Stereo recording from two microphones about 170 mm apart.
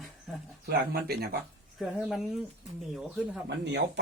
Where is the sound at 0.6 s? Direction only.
65° right (ahead or behind).